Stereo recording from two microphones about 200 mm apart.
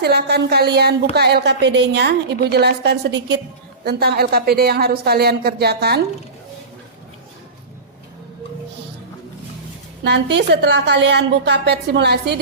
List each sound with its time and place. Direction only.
0.0 s a woman's voice: 55° right (ahead or behind)
10.3 s a woman's voice: 60° right (ahead or behind)